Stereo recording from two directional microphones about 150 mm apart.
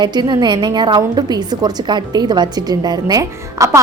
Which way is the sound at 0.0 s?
30° right (ahead or behind).